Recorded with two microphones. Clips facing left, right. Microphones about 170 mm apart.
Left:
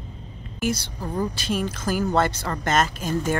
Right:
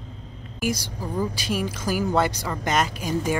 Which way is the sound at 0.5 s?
10° right (ahead or behind).